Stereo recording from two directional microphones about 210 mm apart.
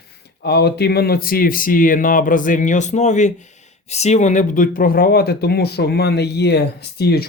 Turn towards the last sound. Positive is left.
turn(degrees=50)  # may be behind; listen again after turning